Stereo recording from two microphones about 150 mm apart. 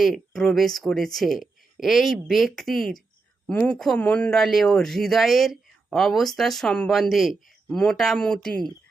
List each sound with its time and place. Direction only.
0.0 s speech: centre (ahead or behind)
3.4 s speech: 10° left (ahead or behind)